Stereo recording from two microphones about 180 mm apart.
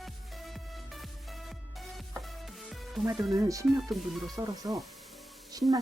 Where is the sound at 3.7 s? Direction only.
Centre (ahead or behind).